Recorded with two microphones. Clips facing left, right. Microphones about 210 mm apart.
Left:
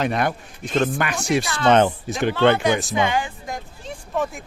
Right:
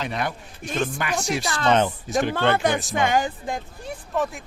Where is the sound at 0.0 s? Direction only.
55° left (ahead or behind).